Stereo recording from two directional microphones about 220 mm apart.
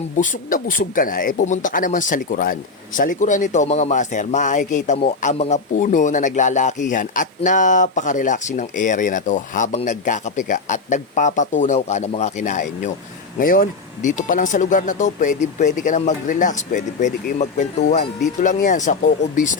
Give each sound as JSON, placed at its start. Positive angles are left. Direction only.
{"t": 0.2, "sound": "speech", "side_deg": 40}